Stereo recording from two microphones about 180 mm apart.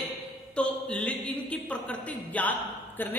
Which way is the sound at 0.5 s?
5° left (ahead or behind).